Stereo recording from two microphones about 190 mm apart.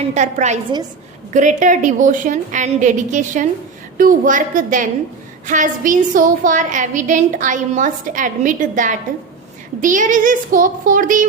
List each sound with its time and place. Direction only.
0.1 s a woman's voice: 40° right (ahead or behind)